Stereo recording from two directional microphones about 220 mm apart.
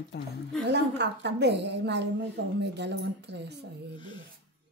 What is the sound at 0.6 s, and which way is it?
A woman's voice, 50° right (ahead or behind).